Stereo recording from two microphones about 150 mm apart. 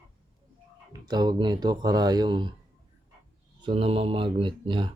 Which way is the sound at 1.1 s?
30° right (ahead or behind).